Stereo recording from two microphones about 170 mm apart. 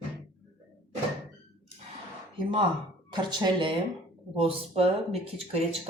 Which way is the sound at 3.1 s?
30° right (ahead or behind).